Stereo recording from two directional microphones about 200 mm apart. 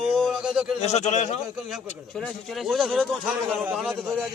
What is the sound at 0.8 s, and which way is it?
Speech, 35° left (ahead or behind).